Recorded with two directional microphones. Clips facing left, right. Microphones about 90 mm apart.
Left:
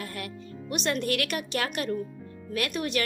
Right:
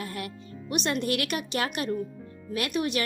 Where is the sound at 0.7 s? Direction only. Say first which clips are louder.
Right 1 dB; 15° right (ahead or behind).